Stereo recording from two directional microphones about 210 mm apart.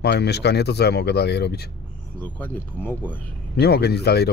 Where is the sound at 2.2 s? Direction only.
10° left (ahead or behind).